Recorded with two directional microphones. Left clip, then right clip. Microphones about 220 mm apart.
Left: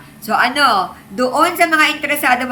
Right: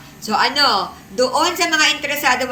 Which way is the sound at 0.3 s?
40° left (ahead or behind).